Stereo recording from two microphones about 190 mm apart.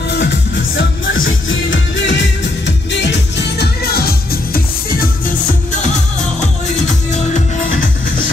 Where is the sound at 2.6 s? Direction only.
65° left (ahead or behind); by 5.1 s 50° left (ahead or behind).